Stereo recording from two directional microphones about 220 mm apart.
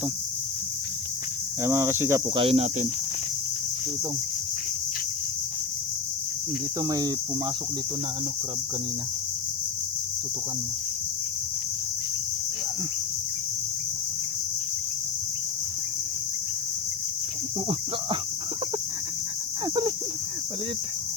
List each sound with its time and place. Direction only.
1.6 s speech: 10° right (ahead or behind)
2.3 s speech: 25° right (ahead or behind)
6.8 s speech: 15° right (ahead or behind)